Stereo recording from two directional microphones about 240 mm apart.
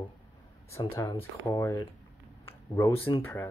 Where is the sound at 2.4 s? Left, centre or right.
Centre.